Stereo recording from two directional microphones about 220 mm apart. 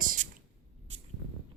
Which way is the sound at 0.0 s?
40° right (ahead or behind).